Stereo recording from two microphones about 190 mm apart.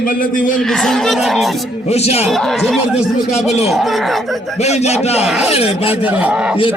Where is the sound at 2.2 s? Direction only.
Centre (ahead or behind).